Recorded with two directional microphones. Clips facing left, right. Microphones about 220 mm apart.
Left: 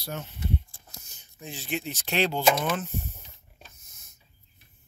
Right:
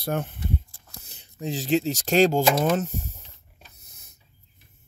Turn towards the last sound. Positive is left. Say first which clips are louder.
# right 6 dB
turn(degrees=-40)  # may be behind; listen again after turning